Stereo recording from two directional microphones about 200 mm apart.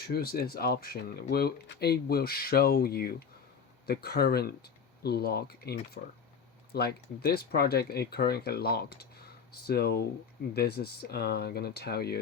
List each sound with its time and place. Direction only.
0.0 s speech: 50° left (ahead or behind)